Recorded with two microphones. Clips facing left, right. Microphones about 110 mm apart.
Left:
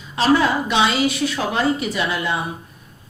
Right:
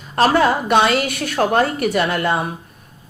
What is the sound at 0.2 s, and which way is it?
A woman's voice, 50° right (ahead or behind).